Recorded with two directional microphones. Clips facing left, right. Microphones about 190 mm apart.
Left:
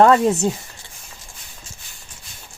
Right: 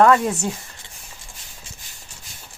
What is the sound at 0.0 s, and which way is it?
Speech, 25° left (ahead or behind).